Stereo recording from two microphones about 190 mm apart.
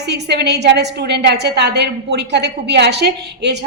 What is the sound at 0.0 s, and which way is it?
A woman's voice, 60° right (ahead or behind).